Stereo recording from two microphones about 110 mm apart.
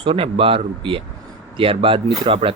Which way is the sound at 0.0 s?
55° right (ahead or behind).